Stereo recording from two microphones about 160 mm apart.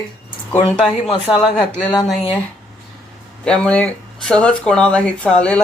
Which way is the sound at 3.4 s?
5° left (ahead or behind).